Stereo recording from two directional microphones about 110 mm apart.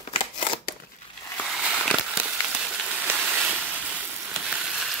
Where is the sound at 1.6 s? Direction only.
5° right (ahead or behind).